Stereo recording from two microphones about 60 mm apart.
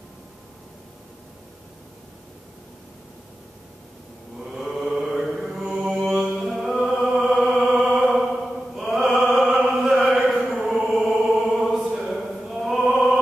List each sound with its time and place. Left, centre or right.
4.4 s mantra: centre
7.2 s music: centre
8.7 s chant: centre
9.3 s music: centre
10.6 s chant: centre